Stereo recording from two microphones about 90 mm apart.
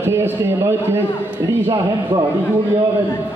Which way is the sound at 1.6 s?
55° right (ahead or behind).